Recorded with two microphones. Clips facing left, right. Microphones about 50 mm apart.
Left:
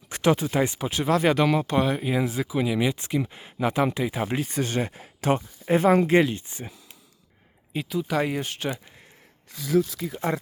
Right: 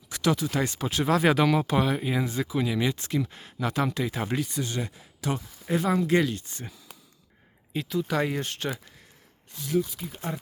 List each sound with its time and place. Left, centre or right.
0.1 s speech: left
0.6 s speech: centre
4.4 s speech: left
6.1 s speech: left; by 8.8 s centre
10.3 s speech: left